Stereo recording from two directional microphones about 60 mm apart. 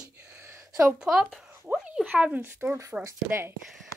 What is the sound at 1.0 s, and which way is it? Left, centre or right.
Speech, centre.